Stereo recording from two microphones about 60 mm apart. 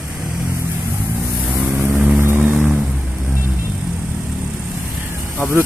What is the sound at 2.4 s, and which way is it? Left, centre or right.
Vehicle, right.